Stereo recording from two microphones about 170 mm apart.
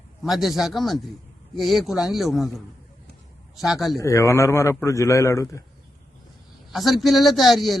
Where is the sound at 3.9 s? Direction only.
20° left (ahead or behind).